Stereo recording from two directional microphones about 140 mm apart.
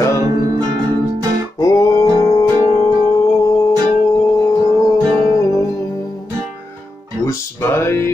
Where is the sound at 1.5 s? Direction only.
25° left (ahead or behind).